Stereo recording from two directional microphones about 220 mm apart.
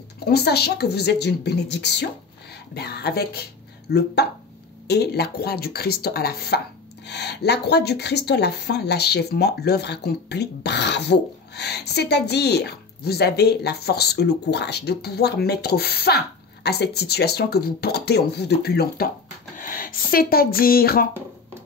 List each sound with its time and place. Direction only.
0.2 s speech: 45° left (ahead or behind)